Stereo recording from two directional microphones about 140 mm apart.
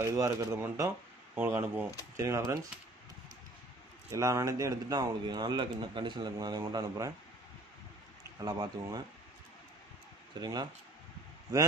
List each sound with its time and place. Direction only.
0.0 s speech: 20° right (ahead or behind)
4.1 s speech: 20° right (ahead or behind)
8.4 s speech: 30° right (ahead or behind)
10.4 s speech: 30° right (ahead or behind)